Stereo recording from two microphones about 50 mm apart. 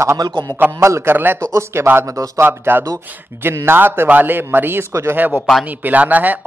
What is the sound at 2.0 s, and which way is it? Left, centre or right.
Speech, right.